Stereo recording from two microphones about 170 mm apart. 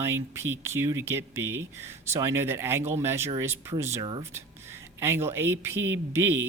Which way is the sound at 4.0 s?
30° right (ahead or behind).